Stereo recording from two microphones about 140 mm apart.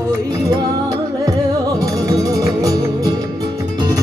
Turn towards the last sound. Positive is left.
turn(degrees=-25)  # may be behind; listen again after turning